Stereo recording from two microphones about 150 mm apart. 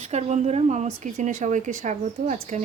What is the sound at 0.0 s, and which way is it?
Speech, 45° right (ahead or behind).